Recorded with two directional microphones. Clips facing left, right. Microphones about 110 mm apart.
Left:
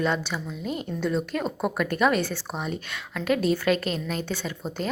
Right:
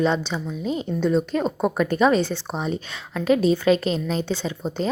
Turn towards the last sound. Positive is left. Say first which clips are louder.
# right 5 dB
turn(degrees=-25)  # may be behind; listen again after turning